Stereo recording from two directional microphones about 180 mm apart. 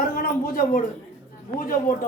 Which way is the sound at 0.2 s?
50° left (ahead or behind).